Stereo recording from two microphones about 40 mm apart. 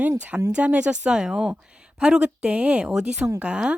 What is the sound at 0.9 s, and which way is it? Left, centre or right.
Speech, right.